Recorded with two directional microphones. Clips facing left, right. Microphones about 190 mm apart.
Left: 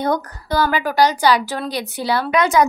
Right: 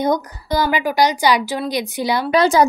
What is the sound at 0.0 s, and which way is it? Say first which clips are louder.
A woman's voice: right 2 dB; 15° right (ahead or behind).